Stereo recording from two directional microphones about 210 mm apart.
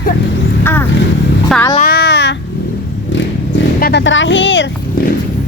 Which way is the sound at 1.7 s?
45° left (ahead or behind).